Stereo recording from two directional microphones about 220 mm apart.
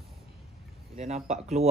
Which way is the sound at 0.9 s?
30° right (ahead or behind).